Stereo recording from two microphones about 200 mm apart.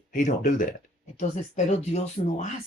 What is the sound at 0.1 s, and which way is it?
Speech, 40° left (ahead or behind).